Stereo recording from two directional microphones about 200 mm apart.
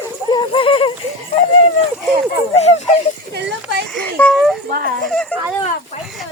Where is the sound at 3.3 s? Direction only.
55° right (ahead or behind).